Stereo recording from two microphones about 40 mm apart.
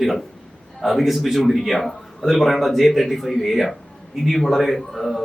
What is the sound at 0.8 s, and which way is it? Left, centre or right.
A man's voice, centre.